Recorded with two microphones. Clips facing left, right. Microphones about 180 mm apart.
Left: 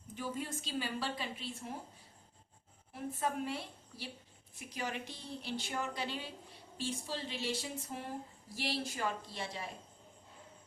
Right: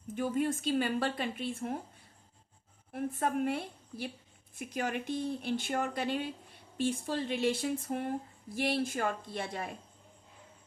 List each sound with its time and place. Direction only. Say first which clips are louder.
0.1 s speech: right 9 dB; 55° right (ahead or behind)
2.9 s speech: right 5 dB; 55° right (ahead or behind)